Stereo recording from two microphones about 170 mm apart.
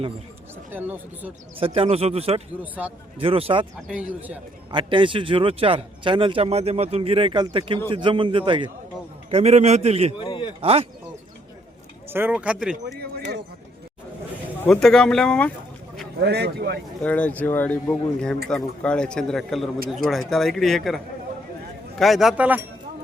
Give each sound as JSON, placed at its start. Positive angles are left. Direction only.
{"t": 0.7, "sound": "speech", "side_deg": -10}
{"t": 1.5, "sound": "speech", "side_deg": -35}
{"t": 2.8, "sound": "a man's voice", "side_deg": -5}
{"t": 3.2, "sound": "speech", "side_deg": -35}
{"t": 3.8, "sound": "speech", "side_deg": -5}
{"t": 4.7, "sound": "a man's voice", "side_deg": -30}
{"t": 9.3, "sound": "speech", "side_deg": -40}
{"t": 10.2, "sound": "a sound", "side_deg": 30}
{"t": 10.6, "sound": "speech", "side_deg": -35}
{"t": 12.0, "sound": "speech", "side_deg": -10}
{"t": 14.6, "sound": "a man's voice", "side_deg": 5}
{"t": 16.2, "sound": "speech", "side_deg": -70}
{"t": 17.0, "sound": "a man's voice", "side_deg": 10}